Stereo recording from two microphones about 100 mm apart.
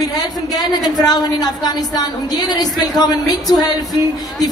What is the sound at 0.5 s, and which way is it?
A woman's voice, 40° left (ahead or behind).